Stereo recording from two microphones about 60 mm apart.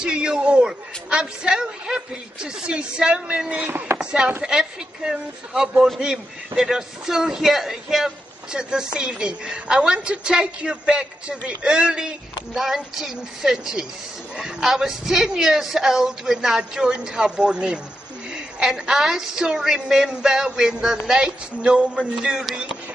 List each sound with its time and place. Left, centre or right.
0.0 s a man's voice: centre
3.5 s speech: right
4.0 s a man's voice: centre
21.5 s a man's voice: centre